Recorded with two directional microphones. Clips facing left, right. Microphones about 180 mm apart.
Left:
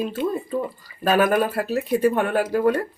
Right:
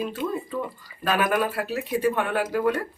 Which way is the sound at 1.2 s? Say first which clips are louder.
Left 3 dB; 40° left (ahead or behind).